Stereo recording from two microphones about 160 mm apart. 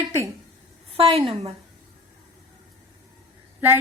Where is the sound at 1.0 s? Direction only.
35° right (ahead or behind).